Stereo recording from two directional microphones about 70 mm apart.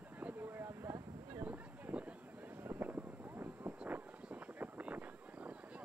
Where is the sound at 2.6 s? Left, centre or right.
Right.